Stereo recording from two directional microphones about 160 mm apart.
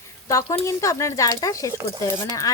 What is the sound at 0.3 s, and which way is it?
Speech, 20° left (ahead or behind).